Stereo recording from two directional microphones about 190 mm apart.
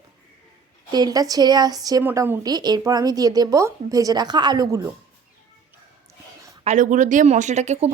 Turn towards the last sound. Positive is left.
turn(degrees=-35)  # may be behind; listen again after turning